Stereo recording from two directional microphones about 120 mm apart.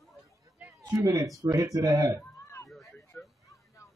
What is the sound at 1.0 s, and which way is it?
Speech, 30° right (ahead or behind).